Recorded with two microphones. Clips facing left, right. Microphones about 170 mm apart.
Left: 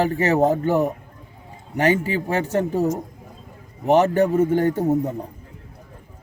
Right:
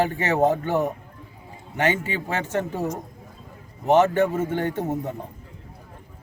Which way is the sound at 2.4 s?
40° left (ahead or behind).